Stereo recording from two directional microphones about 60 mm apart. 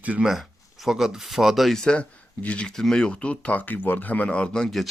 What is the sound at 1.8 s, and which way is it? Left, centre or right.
Speech, centre.